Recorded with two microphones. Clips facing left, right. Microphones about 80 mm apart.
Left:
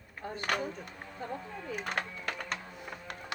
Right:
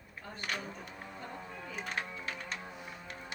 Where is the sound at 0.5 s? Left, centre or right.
Left.